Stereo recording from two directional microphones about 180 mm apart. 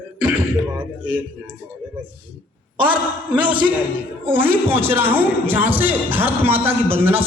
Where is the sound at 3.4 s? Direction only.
25° right (ahead or behind).